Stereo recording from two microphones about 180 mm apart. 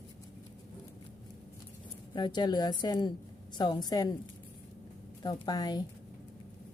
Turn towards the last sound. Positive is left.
turn(degrees=20)  # may be behind; listen again after turning